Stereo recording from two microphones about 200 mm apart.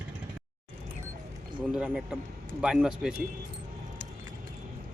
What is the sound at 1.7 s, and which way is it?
Speech, 5° right (ahead or behind).